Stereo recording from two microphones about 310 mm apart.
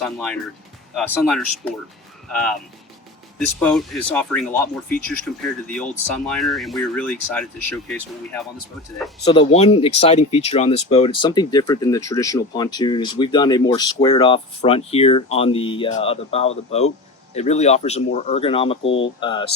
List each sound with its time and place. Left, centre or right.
0.0 s speech: centre
9.2 s speech: centre